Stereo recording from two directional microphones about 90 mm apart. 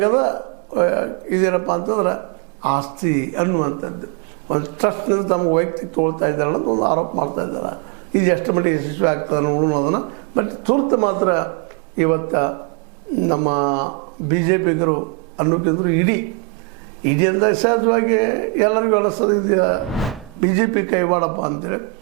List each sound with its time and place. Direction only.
0.0 s speech: 25° right (ahead or behind)
8.1 s speech: 15° right (ahead or behind)
19.9 s speech: centre (ahead or behind)
20.6 s speech: 20° right (ahead or behind)